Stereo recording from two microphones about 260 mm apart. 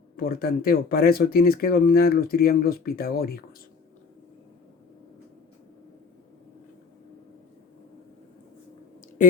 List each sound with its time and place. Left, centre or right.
0.2 s speech: left